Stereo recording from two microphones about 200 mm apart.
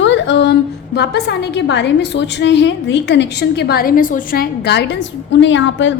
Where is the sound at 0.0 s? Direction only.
65° left (ahead or behind).